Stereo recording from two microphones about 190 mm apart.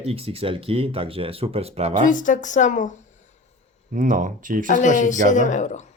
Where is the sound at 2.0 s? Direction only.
40° left (ahead or behind).